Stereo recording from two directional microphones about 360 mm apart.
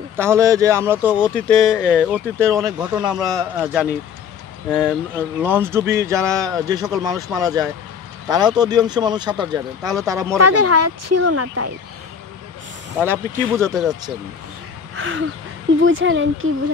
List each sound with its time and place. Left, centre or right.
0.1 s speech: centre
1.1 s speech: centre
10.3 s speech: right
13.0 s speech: centre
15.0 s speech: right